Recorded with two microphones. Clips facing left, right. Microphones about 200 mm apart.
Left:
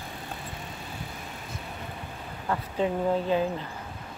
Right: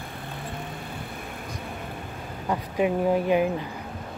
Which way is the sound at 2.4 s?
15° right (ahead or behind).